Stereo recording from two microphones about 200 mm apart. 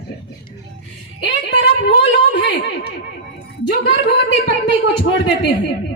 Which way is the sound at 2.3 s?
55° left (ahead or behind).